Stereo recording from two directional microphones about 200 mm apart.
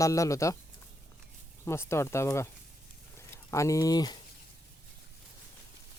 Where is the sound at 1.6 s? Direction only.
15° left (ahead or behind).